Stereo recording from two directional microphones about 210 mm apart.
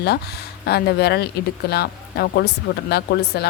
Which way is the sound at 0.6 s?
50° left (ahead or behind).